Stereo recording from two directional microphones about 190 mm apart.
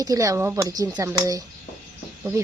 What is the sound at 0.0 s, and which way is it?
Speech, 20° right (ahead or behind).